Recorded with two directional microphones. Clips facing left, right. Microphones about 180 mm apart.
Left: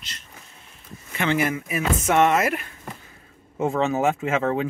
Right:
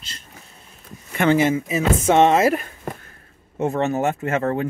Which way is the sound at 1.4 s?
25° right (ahead or behind).